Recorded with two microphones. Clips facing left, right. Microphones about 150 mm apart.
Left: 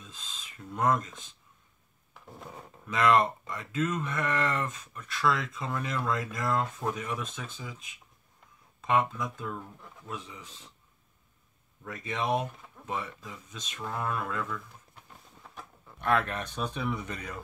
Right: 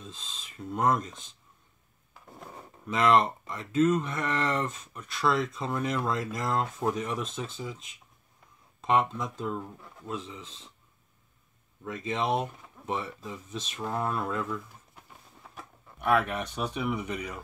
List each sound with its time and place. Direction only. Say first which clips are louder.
0.0 s speech: right 3 dB; 30° right (ahead or behind)
2.9 s speech: right 1 dB; 25° right (ahead or behind)
8.8 s speech: right 1 dB; 25° right (ahead or behind)
11.8 s speech: right 3 dB; 25° right (ahead or behind)
15.4 s speech: even; 5° right (ahead or behind)